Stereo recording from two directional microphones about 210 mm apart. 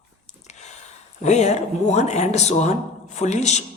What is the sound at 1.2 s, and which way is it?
Speech, 35° left (ahead or behind).